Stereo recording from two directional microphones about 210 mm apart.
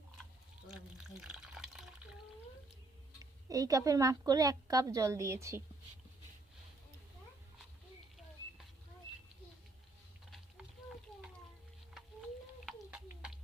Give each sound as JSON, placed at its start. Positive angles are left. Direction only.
{"t": 0.7, "sound": "water", "side_deg": -5}
{"t": 3.5, "sound": "a woman's voice", "side_deg": -15}
{"t": 12.6, "sound": "a sound", "side_deg": -5}